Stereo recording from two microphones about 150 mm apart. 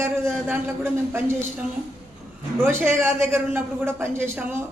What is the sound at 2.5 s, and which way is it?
A woman's voice, 15° right (ahead or behind).